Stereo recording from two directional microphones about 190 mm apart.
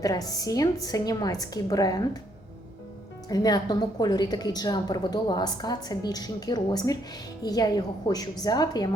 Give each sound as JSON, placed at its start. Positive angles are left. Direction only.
{"t": 0.0, "sound": "a woman's voice", "side_deg": 20}
{"t": 3.2, "sound": "a woman's voice", "side_deg": 20}